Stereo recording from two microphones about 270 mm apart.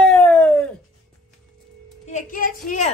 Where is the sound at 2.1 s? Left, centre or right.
Left.